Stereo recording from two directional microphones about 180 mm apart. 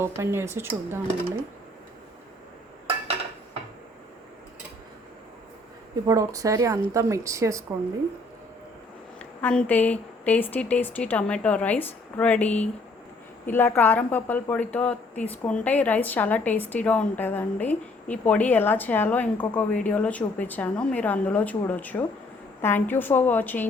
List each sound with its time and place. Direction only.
0.0 s speech: 15° right (ahead or behind)
6.1 s speech: 20° right (ahead or behind)
9.1 s speech: 5° left (ahead or behind)